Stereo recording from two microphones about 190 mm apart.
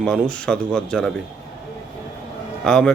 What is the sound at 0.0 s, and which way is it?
Speech, 5° left (ahead or behind).